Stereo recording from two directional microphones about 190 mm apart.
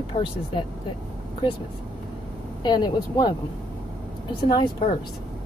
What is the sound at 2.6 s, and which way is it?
Speech, 25° left (ahead or behind).